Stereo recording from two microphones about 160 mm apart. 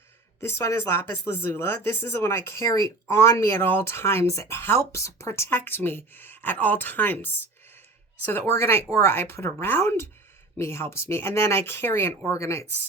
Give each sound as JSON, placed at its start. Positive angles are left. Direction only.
{"t": 0.4, "sound": "speech", "side_deg": 15}